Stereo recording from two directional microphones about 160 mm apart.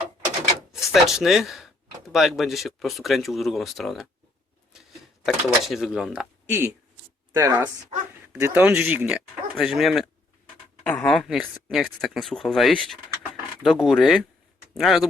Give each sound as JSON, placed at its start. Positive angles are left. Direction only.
{"t": 0.7, "sound": "speech", "side_deg": 0}
{"t": 5.2, "sound": "speech", "side_deg": 0}
{"t": 6.5, "sound": "a man's voice", "side_deg": -15}